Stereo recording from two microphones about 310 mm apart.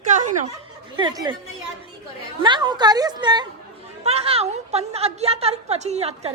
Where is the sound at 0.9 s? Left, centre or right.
Centre.